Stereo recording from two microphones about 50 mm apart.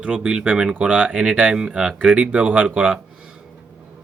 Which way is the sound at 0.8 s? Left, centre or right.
Right.